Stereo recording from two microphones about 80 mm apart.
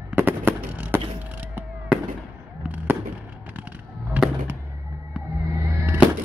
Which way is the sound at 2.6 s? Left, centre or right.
Right.